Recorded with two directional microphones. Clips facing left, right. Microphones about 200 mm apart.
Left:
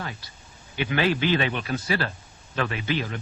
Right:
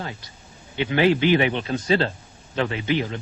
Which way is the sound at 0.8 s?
20° right (ahead or behind).